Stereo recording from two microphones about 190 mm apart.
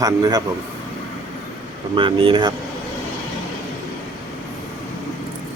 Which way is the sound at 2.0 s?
25° right (ahead or behind).